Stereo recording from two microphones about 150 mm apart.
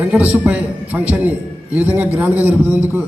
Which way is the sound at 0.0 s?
10° right (ahead or behind).